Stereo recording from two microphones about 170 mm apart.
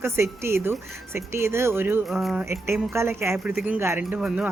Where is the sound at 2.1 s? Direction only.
Centre (ahead or behind).